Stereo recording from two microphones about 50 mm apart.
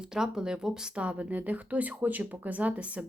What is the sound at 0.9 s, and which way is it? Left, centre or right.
Speech, right.